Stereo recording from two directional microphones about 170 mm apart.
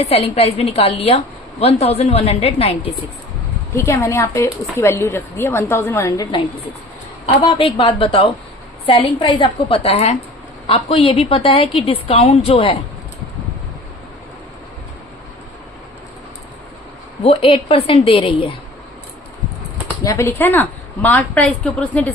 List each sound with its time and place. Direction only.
0.0 s a woman's voice: 35° left (ahead or behind)
3.8 s a woman's voice: 15° left (ahead or behind)
7.3 s a woman's voice: 30° left (ahead or behind)
17.2 s a woman's voice: 30° left (ahead or behind)
20.1 s a woman's voice: 15° left (ahead or behind)